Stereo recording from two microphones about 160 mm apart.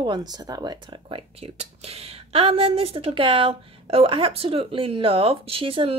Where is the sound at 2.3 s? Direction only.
35° right (ahead or behind).